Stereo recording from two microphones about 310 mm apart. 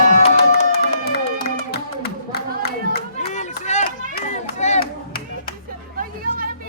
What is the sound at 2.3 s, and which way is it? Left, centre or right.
Run, left.